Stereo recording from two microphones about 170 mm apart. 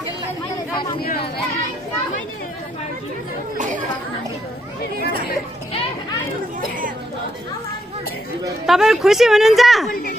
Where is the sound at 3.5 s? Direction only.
45° right (ahead or behind).